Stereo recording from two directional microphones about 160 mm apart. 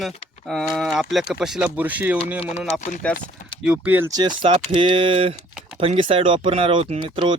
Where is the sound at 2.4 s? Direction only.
40° left (ahead or behind).